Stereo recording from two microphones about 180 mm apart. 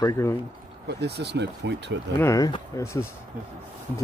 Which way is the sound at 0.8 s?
65° right (ahead or behind).